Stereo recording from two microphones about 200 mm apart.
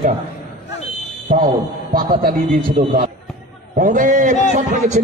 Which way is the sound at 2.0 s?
45° right (ahead or behind).